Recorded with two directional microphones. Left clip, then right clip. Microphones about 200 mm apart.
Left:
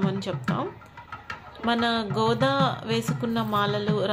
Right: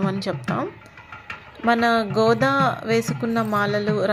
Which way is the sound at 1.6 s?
30° right (ahead or behind).